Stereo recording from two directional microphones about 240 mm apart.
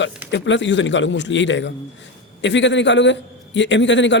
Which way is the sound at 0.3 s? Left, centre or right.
Left.